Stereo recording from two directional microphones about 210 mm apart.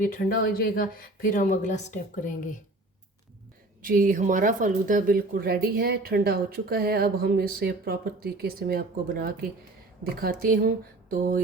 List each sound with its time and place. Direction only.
0.0 s speech: 40° left (ahead or behind)
3.8 s speech: 40° right (ahead or behind)